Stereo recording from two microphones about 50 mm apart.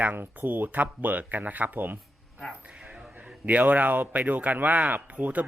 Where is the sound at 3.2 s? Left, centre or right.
Right.